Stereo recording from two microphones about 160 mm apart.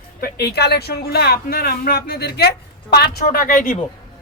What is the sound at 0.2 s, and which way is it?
Speech, 85° left.